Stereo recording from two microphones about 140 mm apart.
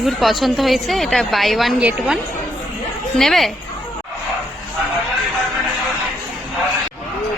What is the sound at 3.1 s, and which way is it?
Speech, centre (ahead or behind).